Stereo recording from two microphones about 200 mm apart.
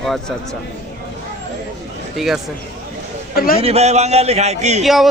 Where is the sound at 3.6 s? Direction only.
30° right (ahead or behind).